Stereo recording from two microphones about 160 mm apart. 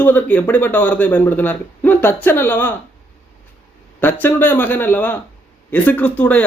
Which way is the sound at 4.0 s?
10° left (ahead or behind).